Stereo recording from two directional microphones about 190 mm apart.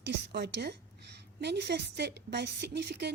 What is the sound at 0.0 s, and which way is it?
A woman's voice, 65° right (ahead or behind).